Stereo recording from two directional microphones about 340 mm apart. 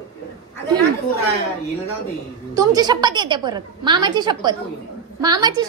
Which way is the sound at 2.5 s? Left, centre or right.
Centre.